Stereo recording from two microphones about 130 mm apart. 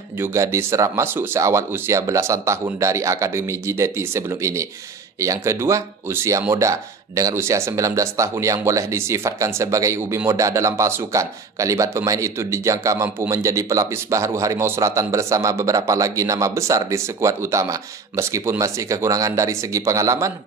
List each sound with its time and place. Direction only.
0.2 s speech: 20° right (ahead or behind)